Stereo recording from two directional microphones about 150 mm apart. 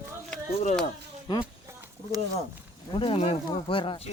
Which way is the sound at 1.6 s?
20° right (ahead or behind).